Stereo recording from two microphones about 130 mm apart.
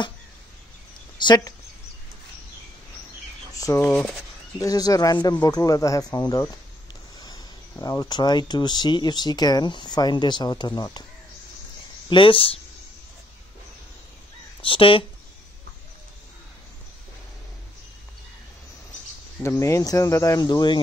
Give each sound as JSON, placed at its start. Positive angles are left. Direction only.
{"t": 1.1, "sound": "speech", "side_deg": 35}
{"t": 3.5, "sound": "a sound", "side_deg": 25}
{"t": 3.8, "sound": "speech", "side_deg": 5}
{"t": 4.6, "sound": "speech", "side_deg": 30}
{"t": 7.8, "sound": "speech", "side_deg": 30}
{"t": 12.1, "sound": "speech", "side_deg": 40}
{"t": 14.6, "sound": "speech", "side_deg": 40}
{"t": 19.4, "sound": "speech", "side_deg": 20}